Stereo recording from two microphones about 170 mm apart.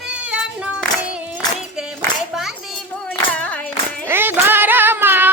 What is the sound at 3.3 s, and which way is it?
Clapping, 5° left (ahead or behind).